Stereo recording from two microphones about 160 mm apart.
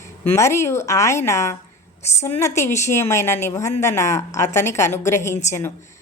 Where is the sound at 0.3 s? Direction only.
15° left (ahead or behind).